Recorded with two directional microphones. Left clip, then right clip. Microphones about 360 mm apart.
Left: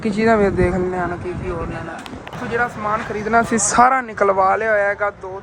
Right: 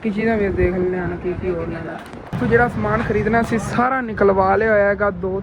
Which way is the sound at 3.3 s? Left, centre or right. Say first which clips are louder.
Left 3 dB; centre.